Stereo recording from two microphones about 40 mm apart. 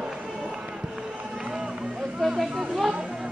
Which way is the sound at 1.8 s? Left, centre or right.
Right.